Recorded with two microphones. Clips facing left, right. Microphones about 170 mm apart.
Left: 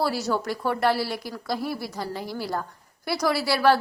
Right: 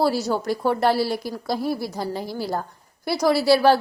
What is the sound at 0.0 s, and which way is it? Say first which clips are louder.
A woman's voice: right 4 dB; 25° right (ahead or behind).